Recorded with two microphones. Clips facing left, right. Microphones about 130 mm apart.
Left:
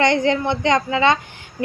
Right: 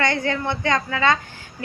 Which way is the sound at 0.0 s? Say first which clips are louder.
Left 5 dB; 20° left (ahead or behind).